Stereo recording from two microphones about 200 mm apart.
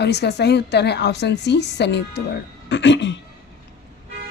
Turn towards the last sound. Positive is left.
turn(degrees=65)  # may be behind; listen again after turning